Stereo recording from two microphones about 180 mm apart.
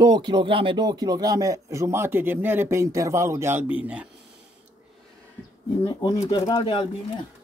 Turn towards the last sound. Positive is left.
turn(degrees=30)  # may be behind; listen again after turning